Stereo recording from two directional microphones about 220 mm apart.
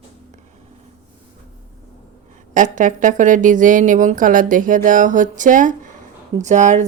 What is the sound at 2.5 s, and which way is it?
Speech, 35° right (ahead or behind).